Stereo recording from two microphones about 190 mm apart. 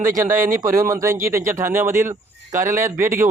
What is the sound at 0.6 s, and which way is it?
Speech, 15° right (ahead or behind).